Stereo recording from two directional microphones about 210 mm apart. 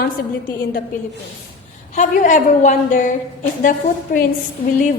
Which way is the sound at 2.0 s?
35° left (ahead or behind).